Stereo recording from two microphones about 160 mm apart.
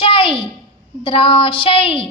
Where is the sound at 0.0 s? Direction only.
35° left (ahead or behind).